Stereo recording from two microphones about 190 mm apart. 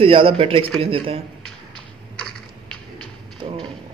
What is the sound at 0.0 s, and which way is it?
Speech, 30° right (ahead or behind).